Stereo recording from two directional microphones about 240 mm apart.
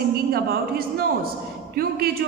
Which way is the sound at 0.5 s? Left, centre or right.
Right.